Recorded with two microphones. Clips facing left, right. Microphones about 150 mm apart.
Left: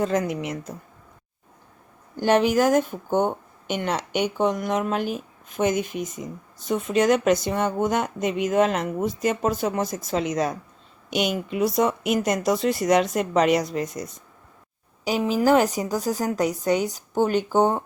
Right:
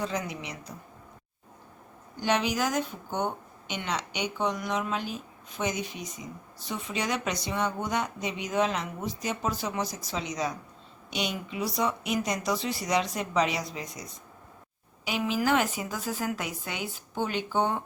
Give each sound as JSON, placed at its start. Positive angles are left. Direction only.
{"t": 0.0, "sound": "speech", "side_deg": 50}
{"t": 2.1, "sound": "speech", "side_deg": 50}
{"t": 15.0, "sound": "a woman's voice", "side_deg": 40}